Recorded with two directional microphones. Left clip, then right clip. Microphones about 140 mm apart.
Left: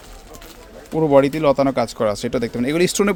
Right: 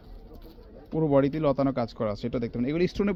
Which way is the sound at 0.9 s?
20° left (ahead or behind).